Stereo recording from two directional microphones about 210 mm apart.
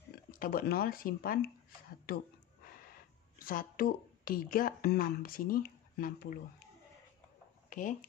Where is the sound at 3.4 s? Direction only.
45° left (ahead or behind).